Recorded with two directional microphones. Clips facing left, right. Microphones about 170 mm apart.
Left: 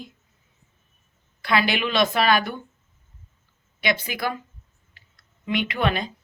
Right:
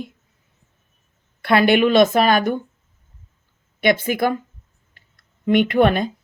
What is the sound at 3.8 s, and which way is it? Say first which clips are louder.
Speech: right 8 dB; 50° right (ahead or behind).